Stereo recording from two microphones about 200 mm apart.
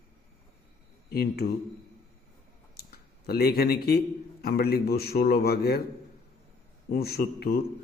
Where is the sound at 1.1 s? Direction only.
50° left (ahead or behind).